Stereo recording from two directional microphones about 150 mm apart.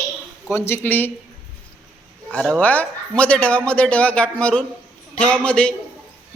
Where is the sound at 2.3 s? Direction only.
10° left (ahead or behind).